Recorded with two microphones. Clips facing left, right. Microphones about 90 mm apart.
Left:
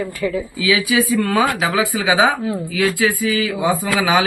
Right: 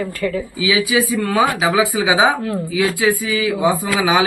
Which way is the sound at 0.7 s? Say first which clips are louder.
Left 1 dB; 15° right (ahead or behind).